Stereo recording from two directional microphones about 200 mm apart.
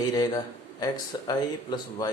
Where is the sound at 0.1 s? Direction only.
20° left (ahead or behind).